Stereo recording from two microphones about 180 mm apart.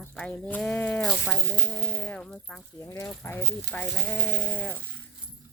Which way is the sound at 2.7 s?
15° left (ahead or behind).